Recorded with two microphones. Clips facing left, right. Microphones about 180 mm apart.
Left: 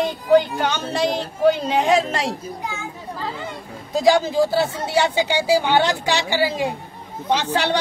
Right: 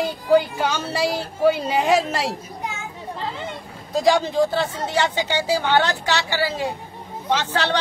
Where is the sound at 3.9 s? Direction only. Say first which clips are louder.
Left 2 dB; centre (ahead or behind).